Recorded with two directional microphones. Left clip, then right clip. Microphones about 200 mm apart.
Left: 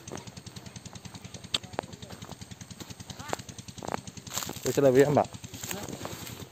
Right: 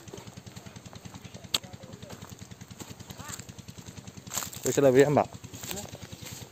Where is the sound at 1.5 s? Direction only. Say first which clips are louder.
Right 1 dB; 10° right (ahead or behind).